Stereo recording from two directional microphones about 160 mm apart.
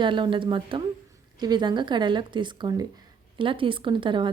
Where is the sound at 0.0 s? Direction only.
30° right (ahead or behind).